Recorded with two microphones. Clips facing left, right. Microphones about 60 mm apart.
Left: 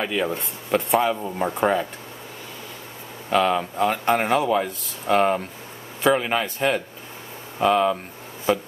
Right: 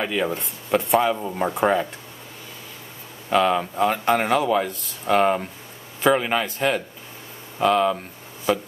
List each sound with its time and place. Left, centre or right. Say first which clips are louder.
0.0 s speech: even; centre
3.3 s speech: right 1 dB; centre
8.5 s a sound: even; centre